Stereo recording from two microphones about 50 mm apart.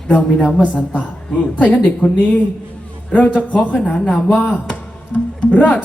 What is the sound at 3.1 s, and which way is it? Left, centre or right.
Speech, left.